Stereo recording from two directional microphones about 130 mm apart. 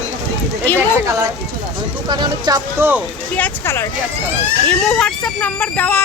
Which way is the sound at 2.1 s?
35° right (ahead or behind).